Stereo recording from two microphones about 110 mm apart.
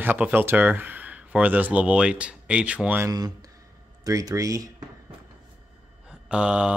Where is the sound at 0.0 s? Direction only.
20° right (ahead or behind).